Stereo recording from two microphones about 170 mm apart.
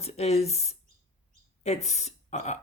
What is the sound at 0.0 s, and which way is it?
Speech, 40° left (ahead or behind).